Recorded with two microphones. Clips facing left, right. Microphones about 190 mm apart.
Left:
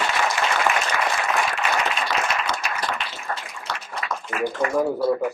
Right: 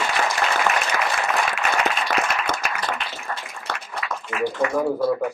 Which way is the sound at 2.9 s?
50° right (ahead or behind).